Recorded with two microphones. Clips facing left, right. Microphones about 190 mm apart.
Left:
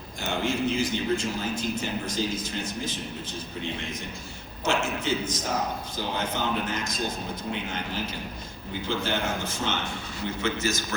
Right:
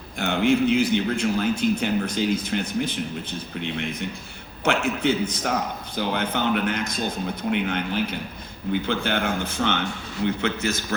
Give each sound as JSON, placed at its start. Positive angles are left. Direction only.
{"t": 0.2, "sound": "a man's voice", "side_deg": -65}
{"t": 4.6, "sound": "a man's voice", "side_deg": -60}